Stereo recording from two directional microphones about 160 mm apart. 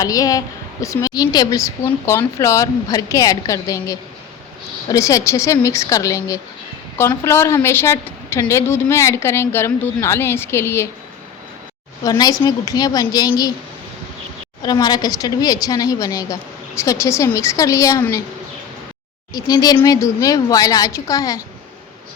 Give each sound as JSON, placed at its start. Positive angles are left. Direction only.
{"t": 0.0, "sound": "a woman's voice", "side_deg": 20}
{"t": 12.0, "sound": "a woman's voice", "side_deg": 25}
{"t": 14.6, "sound": "a woman's voice", "side_deg": 25}
{"t": 19.3, "sound": "a woman's voice", "side_deg": 25}